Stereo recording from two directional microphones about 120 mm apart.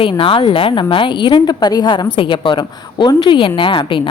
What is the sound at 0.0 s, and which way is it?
A woman's voice, 50° left (ahead or behind).